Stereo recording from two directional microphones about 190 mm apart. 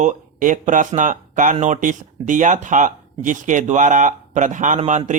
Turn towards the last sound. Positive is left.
turn(degrees=-40)  # may be behind; listen again after turning